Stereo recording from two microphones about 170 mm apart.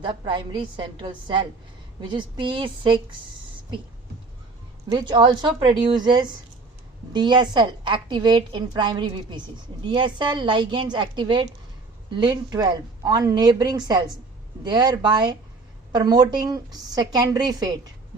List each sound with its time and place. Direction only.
0.0 s a woman's voice: 30° right (ahead or behind)
4.9 s a woman's voice: 25° right (ahead or behind)